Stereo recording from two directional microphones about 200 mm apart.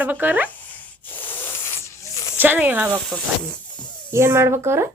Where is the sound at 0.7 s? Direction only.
10° left (ahead or behind).